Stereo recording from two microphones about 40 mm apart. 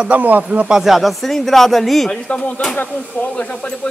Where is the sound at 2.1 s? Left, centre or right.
Left.